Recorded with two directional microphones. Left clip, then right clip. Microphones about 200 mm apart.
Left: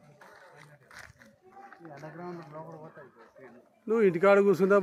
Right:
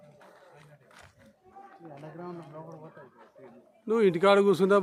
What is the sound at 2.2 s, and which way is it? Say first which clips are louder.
Speech: even; 10° left (ahead or behind).